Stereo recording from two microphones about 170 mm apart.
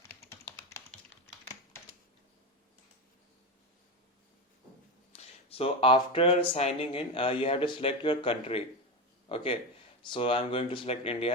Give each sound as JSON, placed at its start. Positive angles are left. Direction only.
{"t": 0.0, "sound": "computer keyboard", "side_deg": 15}
{"t": 5.1, "sound": "speech", "side_deg": 35}